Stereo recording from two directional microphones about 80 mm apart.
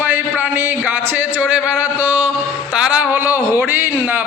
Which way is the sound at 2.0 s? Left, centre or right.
Right.